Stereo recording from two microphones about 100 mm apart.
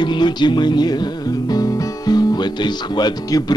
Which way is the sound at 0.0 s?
50° left (ahead or behind).